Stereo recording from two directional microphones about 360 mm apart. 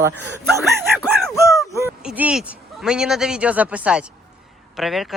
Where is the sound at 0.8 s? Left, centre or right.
Centre.